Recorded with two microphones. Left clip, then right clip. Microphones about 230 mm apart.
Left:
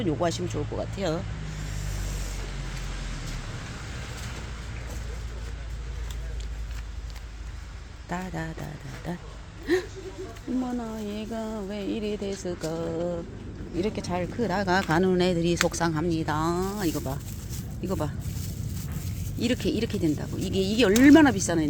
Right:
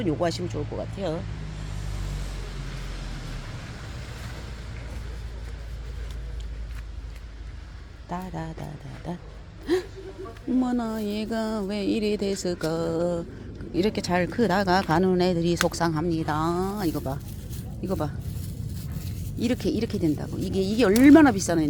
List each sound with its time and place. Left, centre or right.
0.0 s speech: centre
8.1 s speech: centre
9.7 s a sound: centre
10.7 s music: right
13.7 s speech: right; by 18.1 s centre
19.4 s speech: centre